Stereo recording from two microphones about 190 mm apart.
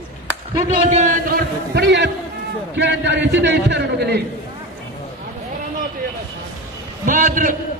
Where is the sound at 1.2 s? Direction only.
55° right (ahead or behind).